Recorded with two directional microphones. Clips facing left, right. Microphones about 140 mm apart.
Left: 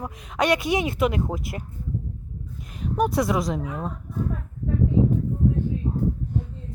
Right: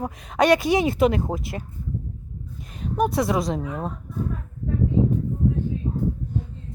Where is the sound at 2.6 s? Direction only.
25° right (ahead or behind).